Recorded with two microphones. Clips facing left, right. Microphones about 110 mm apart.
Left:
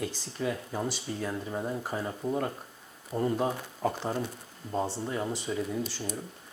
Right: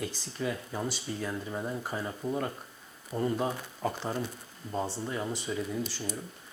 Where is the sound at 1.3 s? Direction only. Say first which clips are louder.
Left 2 dB; 30° left (ahead or behind).